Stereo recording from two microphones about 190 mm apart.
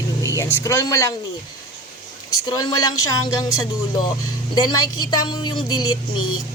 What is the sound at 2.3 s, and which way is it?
A woman's voice, 20° left (ahead or behind).